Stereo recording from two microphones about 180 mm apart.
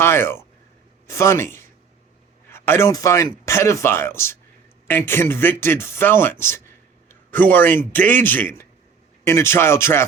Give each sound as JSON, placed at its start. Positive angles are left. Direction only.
{"t": 0.0, "sound": "speech", "side_deg": 15}
{"t": 7.1, "sound": "a sound", "side_deg": 10}
{"t": 7.9, "sound": "speech", "side_deg": 10}